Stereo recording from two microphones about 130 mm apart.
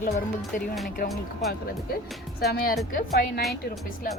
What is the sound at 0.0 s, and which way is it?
Speech, 80° left.